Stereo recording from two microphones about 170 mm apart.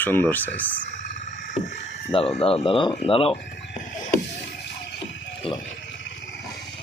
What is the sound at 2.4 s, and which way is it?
Speech, 35° left (ahead or behind).